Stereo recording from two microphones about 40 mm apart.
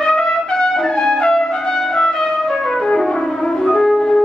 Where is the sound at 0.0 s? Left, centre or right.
Centre.